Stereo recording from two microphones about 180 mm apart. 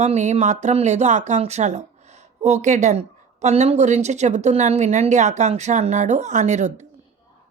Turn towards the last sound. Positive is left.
turn(degrees=-40)  # may be behind; listen again after turning